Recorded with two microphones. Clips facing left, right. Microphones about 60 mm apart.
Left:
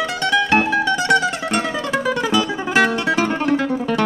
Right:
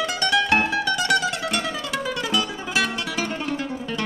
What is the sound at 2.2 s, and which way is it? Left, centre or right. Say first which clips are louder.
Music: left 6 dB; centre.